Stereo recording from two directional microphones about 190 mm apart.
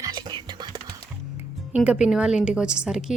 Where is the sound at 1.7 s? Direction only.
5° right (ahead or behind).